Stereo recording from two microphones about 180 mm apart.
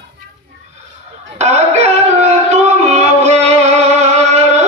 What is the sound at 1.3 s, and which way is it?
Music, 40° right (ahead or behind).